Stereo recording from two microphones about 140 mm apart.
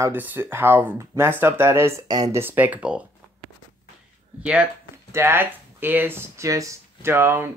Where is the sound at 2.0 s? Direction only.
30° right (ahead or behind).